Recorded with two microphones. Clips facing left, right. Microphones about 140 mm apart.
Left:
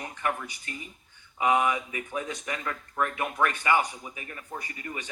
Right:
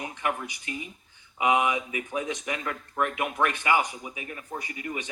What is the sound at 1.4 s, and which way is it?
Speech, 10° right (ahead or behind).